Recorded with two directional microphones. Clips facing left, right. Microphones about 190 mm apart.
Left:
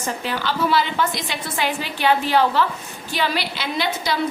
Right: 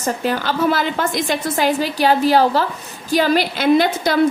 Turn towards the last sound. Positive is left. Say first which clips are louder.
# right 9 dB
turn(degrees=-50)  # may be behind; listen again after turning